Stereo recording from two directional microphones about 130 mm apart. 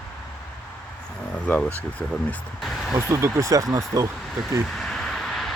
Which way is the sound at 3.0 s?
20° right (ahead or behind).